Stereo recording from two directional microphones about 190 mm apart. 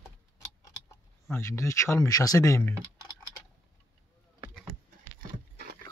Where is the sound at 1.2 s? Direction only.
15° left (ahead or behind).